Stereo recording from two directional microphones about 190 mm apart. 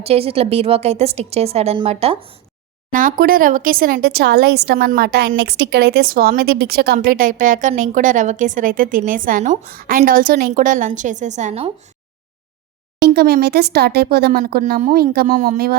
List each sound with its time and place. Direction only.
0.0 s a woman's voice: 30° right (ahead or behind)
2.9 s a woman's voice: 45° right (ahead or behind)
13.0 s speech: 55° right (ahead or behind)
14.8 s speech: 45° right (ahead or behind)